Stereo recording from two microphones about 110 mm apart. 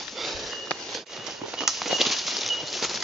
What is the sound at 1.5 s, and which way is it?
Bird flight, 5° right (ahead or behind).